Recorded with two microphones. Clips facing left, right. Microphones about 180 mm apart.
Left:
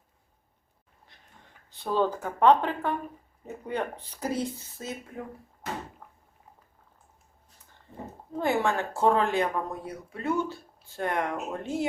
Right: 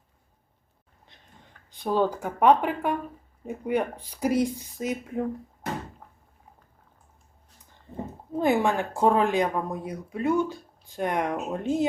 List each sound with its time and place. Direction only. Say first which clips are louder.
1.7 s speech: right 2 dB; 15° right (ahead or behind)
8.4 s speech: right 3 dB; 15° right (ahead or behind)